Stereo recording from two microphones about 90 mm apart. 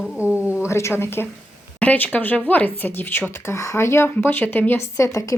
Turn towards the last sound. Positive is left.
turn(degrees=35)  # may be behind; listen again after turning